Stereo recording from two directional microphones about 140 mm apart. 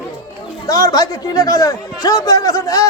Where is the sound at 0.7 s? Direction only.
25° left (ahead or behind).